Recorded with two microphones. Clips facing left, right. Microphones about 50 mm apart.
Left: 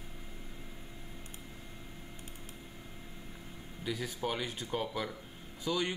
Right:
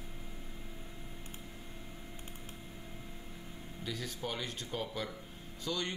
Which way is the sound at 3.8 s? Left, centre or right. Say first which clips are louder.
Left 4 dB; centre.